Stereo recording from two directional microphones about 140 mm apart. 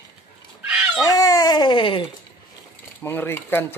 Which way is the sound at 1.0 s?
25° left (ahead or behind).